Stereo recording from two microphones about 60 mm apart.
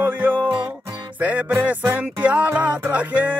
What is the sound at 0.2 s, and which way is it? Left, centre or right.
Music, right.